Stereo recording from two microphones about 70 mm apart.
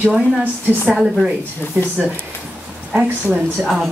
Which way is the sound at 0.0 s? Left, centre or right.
Right.